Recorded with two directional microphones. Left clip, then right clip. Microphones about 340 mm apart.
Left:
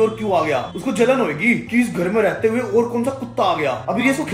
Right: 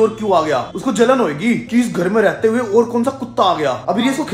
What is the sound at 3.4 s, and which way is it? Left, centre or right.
Speech, right.